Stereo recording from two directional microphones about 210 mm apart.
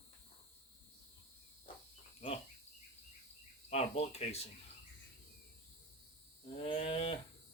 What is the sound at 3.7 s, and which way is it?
Speech, 30° left (ahead or behind).